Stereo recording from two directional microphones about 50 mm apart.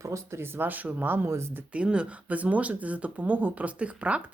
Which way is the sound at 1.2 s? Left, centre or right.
Right.